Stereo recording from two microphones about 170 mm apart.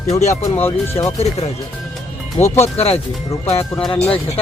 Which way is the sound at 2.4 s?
40° left (ahead or behind).